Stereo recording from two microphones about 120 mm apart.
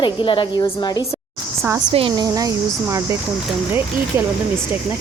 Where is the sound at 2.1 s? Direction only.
30° right (ahead or behind).